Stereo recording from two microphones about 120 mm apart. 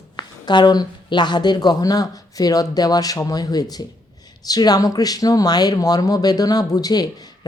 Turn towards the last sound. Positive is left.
turn(degrees=35)  # may be behind; listen again after turning